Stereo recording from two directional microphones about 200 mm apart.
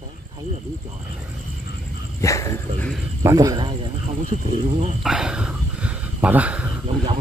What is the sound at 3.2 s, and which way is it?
Speech, 15° right (ahead or behind).